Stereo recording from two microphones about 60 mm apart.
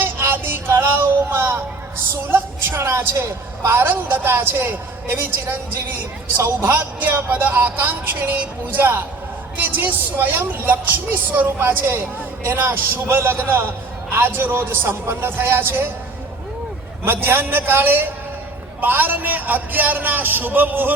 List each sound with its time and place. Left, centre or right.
0.0 s music: right
2.3 s a woman's voice: right
17.1 s speech: right